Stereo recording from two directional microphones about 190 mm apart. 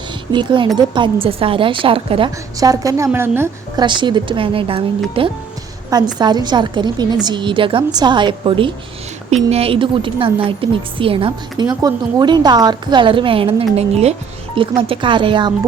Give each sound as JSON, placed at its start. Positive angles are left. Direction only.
{"t": 0.3, "sound": "a woman's voice", "side_deg": -25}
{"t": 3.8, "sound": "a woman's voice", "side_deg": -25}